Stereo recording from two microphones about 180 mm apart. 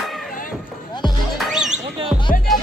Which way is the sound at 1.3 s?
Centre (ahead or behind).